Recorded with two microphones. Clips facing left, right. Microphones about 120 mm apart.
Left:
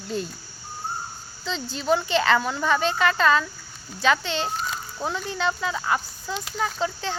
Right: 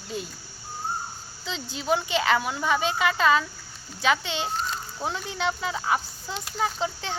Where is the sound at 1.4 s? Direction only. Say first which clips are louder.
Left 4 dB; 15° right (ahead or behind).